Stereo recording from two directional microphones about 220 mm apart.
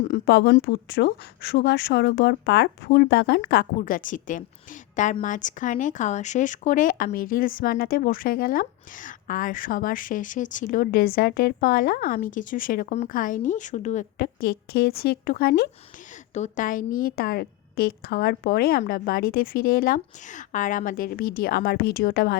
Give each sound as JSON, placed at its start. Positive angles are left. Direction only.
{"t": 0.0, "sound": "a woman's voice", "side_deg": 45}
{"t": 16.3, "sound": "speech", "side_deg": 35}